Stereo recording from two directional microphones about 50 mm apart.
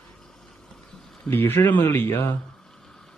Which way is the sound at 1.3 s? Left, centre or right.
Left.